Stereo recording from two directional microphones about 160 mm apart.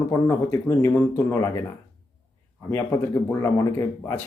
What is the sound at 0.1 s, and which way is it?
Speech, 15° left (ahead or behind).